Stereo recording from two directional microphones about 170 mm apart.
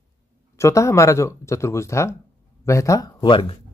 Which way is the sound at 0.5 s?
15° left (ahead or behind).